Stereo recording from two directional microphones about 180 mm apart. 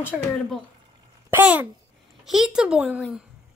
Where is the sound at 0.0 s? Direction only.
5° left (ahead or behind).